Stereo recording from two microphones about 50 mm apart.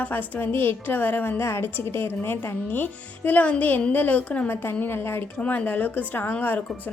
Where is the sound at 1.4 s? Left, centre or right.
Left.